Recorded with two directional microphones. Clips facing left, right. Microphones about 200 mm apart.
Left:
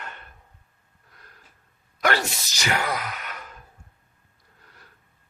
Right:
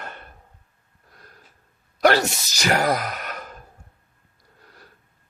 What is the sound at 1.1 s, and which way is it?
Gasp, 35° right (ahead or behind).